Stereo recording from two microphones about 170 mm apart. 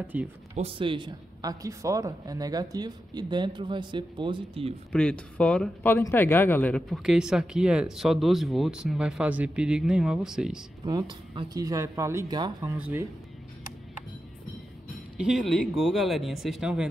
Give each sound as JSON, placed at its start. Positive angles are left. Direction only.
{"t": 0.0, "sound": "speech", "side_deg": -10}
{"t": 0.6, "sound": "speech", "side_deg": -35}
{"t": 4.9, "sound": "speech", "side_deg": 5}
{"t": 10.9, "sound": "speech", "side_deg": -25}
{"t": 12.7, "sound": "speech", "side_deg": -10}
{"t": 15.1, "sound": "speech", "side_deg": 0}